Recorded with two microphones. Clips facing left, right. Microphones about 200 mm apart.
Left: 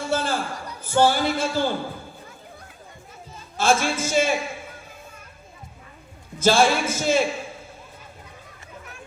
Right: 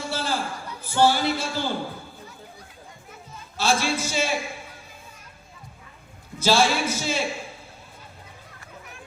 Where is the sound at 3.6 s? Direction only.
50° left (ahead or behind).